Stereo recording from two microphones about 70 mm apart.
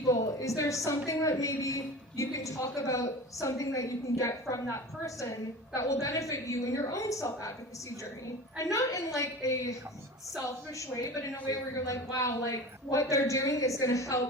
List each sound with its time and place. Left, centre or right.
0.1 s a sound: left
0.9 s a woman's voice: left
8.5 s a woman's voice: left